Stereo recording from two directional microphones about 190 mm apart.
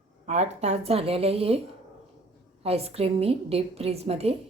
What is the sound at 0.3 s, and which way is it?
A woman's voice, 35° right (ahead or behind).